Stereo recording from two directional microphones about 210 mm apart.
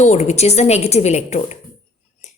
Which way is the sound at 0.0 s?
35° left (ahead or behind).